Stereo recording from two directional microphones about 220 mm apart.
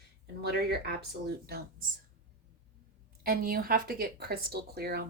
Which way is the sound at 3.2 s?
40° right (ahead or behind).